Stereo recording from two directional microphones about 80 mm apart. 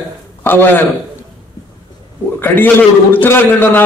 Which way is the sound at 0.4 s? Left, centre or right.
Left.